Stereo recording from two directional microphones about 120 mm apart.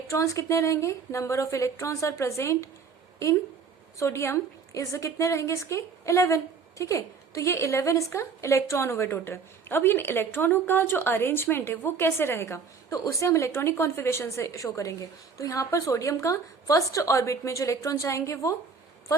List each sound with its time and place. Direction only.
0.1 s a woman's voice: 25° left (ahead or behind)